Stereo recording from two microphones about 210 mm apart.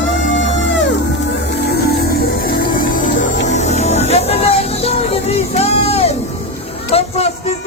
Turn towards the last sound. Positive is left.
turn(degrees=30)  # may be behind; listen again after turning